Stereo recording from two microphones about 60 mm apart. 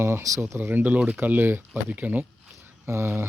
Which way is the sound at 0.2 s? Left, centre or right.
Right.